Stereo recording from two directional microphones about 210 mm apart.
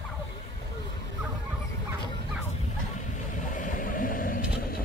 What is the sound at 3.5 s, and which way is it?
Vehicle, 40° left (ahead or behind).